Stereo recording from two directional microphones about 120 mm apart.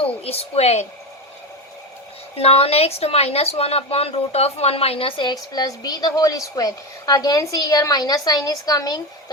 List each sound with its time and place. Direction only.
0.2 s a woman's voice: 55° left (ahead or behind)
2.4 s speech: 55° left (ahead or behind); by 9.0 s 30° left (ahead or behind)